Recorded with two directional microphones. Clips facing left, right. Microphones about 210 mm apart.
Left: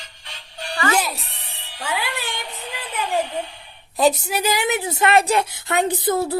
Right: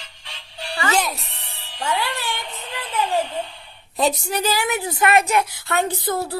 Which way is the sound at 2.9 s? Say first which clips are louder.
Right 1 dB; 15° left (ahead or behind).